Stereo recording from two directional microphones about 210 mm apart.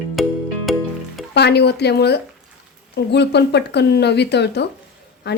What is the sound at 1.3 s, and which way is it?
Speech, 50° left (ahead or behind).